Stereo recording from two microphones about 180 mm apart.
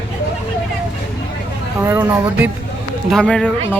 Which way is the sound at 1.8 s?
10° right (ahead or behind).